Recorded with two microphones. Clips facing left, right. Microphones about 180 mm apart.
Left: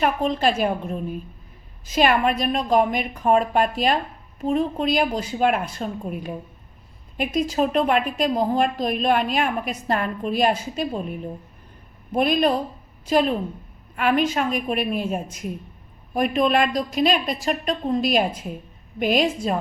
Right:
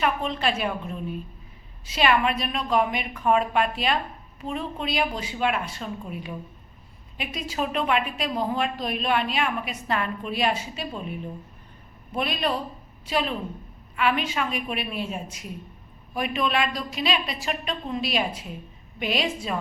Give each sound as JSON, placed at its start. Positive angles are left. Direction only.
{"t": 0.0, "sound": "a woman's voice", "side_deg": 40}
{"t": 7.2, "sound": "a woman's voice", "side_deg": 45}
{"t": 12.1, "sound": "a woman's voice", "side_deg": 45}